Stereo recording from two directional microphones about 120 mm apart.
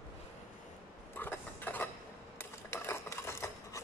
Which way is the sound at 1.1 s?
15° left (ahead or behind).